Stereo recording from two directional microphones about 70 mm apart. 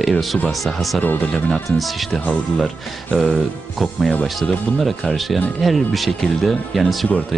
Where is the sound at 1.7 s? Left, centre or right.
Centre.